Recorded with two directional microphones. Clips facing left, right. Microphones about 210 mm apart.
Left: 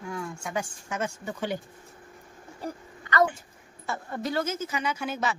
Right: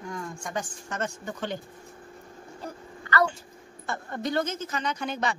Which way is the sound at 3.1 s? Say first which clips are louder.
Left 1 dB; 20° left (ahead or behind).